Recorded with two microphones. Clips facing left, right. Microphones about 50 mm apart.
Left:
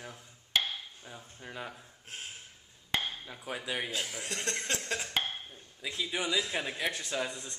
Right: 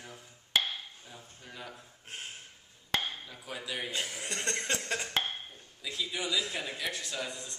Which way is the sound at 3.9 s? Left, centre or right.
Centre.